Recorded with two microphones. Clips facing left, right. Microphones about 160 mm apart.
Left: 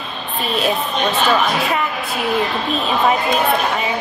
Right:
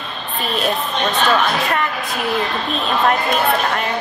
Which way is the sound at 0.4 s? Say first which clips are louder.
Left 1 dB; centre (ahead or behind).